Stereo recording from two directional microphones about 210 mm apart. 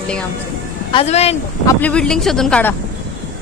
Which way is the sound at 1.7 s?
10° left (ahead or behind).